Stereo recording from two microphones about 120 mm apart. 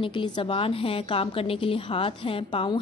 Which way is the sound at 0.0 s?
45° left (ahead or behind).